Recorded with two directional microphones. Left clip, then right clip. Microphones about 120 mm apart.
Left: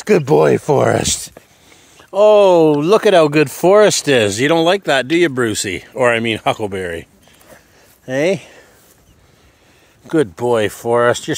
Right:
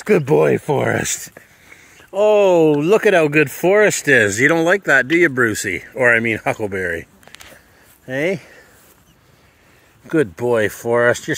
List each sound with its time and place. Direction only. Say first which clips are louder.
0.0 s speech: left 2 dB; 20° left (ahead or behind); by 1.0 s 40° left (ahead or behind)
2.0 s speech: left 4 dB; 20° left (ahead or behind)
3.3 s speech: left 3 dB; 30° left (ahead or behind)
5.7 s speech: left 1 dB; 30° left (ahead or behind)
8.1 s speech: left 4 dB; 45° left (ahead or behind)
10.0 s speech: left 2 dB; 10° left (ahead or behind)